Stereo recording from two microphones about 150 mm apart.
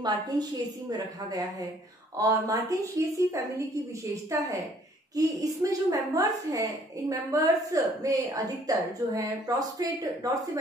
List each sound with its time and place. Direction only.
0.0 s a woman's voice: 25° right (ahead or behind)